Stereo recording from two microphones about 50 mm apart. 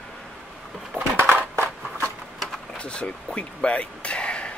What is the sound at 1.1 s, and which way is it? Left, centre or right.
Crushing, right.